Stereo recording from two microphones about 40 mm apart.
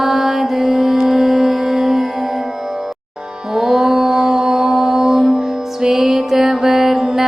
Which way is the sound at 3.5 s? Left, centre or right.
Centre.